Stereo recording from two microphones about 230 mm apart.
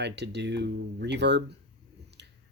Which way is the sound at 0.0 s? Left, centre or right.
Right.